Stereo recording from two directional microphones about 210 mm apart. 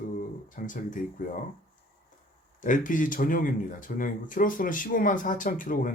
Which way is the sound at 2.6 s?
40° left (ahead or behind).